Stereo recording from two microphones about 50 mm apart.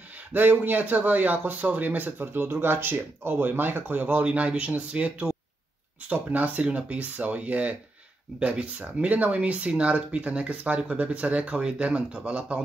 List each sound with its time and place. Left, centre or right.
0.3 s speech: right